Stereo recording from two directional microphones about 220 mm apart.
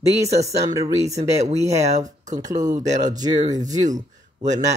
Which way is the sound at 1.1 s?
30° right (ahead or behind).